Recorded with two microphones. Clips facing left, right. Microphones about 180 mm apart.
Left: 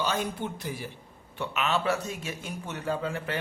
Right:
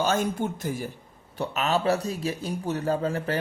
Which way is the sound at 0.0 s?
45° right (ahead or behind).